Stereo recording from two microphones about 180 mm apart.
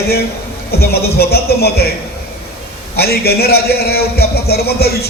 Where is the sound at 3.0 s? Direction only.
60° left (ahead or behind).